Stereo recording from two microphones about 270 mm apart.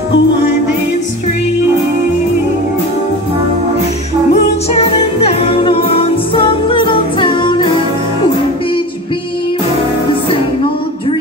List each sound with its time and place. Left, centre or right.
4.3 s music: left